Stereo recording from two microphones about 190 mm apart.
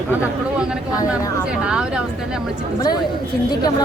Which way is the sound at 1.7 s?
5° right (ahead or behind).